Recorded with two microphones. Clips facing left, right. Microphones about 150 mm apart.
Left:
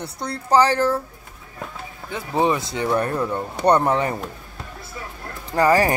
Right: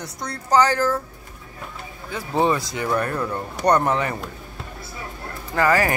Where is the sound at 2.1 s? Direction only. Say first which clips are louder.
Even; 15° left (ahead or behind).